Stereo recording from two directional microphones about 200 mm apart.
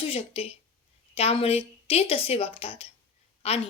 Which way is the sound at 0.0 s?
30° left (ahead or behind).